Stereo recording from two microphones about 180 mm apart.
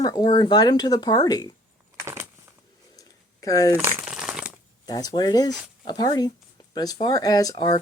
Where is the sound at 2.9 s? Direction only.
20° left (ahead or behind).